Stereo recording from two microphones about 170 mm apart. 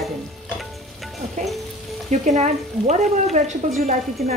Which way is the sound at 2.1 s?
40° right (ahead or behind).